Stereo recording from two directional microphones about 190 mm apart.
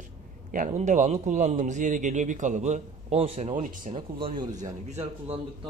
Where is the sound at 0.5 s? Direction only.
40° right (ahead or behind).